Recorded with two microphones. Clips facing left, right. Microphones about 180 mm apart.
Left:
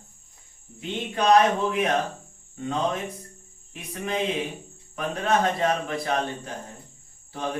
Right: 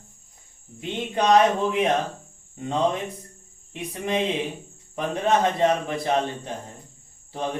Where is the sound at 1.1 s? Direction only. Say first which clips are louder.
Right 1 dB; 20° right (ahead or behind).